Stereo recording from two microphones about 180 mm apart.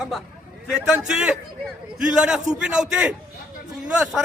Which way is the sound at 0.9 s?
5° right (ahead or behind).